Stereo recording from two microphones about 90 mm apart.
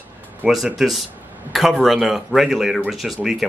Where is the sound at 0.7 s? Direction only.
Centre (ahead or behind).